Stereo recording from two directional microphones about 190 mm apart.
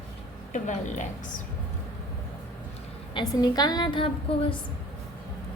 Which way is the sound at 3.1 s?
20° left (ahead or behind).